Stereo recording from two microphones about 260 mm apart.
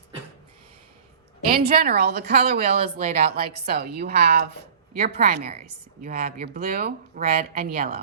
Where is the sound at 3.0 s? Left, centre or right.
Right.